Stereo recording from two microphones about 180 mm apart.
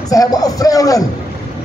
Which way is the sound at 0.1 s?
20° left (ahead or behind).